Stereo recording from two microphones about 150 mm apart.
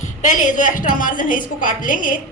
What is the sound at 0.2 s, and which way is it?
A woman's voice, 55° left (ahead or behind).